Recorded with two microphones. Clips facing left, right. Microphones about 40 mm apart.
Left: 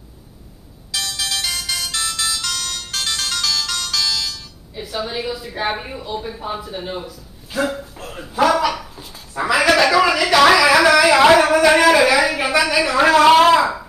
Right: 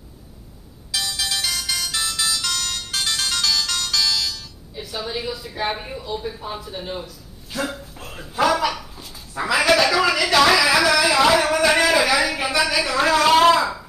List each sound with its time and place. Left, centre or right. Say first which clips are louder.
0.9 s music: left 1 dB; centre
4.8 s speech: left 3 dB; centre
7.7 s a sound: left 5 dB; centre; by 11.4 s left
11.4 s speech: left 5 dB; centre
11.8 s a sound: left 5 dB; centre
12.3 s speech: left 3 dB; centre